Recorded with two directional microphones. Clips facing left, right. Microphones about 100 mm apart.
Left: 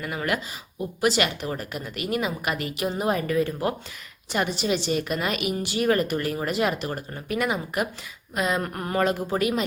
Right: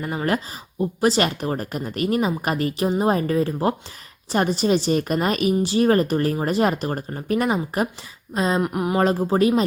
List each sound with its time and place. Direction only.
0.0 s a woman's voice: 35° right (ahead or behind)
8.6 s a sound: 15° right (ahead or behind)
9.0 s a woman's voice: 30° right (ahead or behind)